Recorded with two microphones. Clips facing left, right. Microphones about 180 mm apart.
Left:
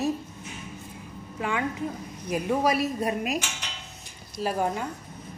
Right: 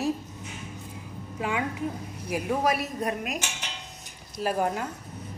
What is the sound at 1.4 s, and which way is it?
A woman's voice, 10° right (ahead or behind).